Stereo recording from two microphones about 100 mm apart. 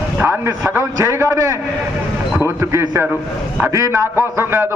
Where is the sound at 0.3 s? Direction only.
25° right (ahead or behind).